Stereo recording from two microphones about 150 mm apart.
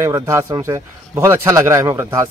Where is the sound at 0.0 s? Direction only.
20° right (ahead or behind).